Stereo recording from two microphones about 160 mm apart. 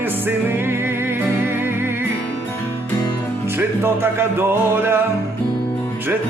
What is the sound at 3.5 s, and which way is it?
Music, 15° right (ahead or behind).